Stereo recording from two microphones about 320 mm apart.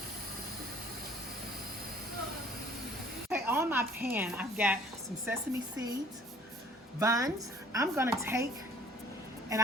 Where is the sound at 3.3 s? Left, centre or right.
Centre.